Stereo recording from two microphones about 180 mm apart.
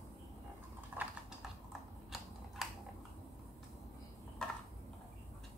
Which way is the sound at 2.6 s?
Centre (ahead or behind).